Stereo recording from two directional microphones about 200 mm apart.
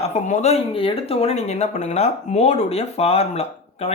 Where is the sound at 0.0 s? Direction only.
35° left (ahead or behind).